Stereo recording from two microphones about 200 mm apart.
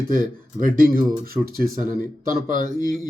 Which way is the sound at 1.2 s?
45° right (ahead or behind).